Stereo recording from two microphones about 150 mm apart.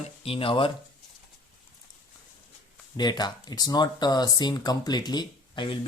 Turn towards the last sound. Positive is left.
turn(degrees=30)  # may be behind; listen again after turning